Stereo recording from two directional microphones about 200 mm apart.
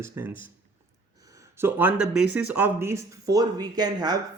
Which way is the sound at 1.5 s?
10° right (ahead or behind).